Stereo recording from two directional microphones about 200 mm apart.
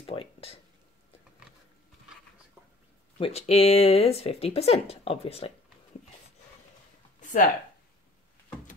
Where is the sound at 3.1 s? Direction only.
30° left (ahead or behind).